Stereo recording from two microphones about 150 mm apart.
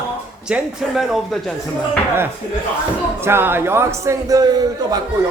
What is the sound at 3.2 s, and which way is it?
A man's voice, 15° right (ahead or behind).